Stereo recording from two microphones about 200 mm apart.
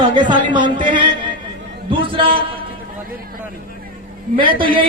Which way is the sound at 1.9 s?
25° right (ahead or behind).